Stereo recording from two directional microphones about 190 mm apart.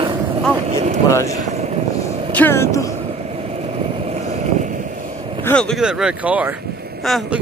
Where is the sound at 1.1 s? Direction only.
15° left (ahead or behind).